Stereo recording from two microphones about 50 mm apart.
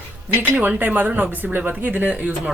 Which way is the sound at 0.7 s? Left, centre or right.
Right.